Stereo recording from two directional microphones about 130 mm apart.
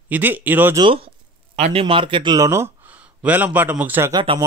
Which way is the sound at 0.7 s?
40° right (ahead or behind).